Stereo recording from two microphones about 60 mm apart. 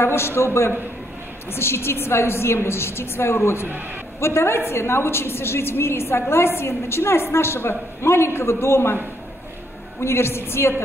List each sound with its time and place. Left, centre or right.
0.0 s a woman's voice: left
9.9 s a woman's voice: left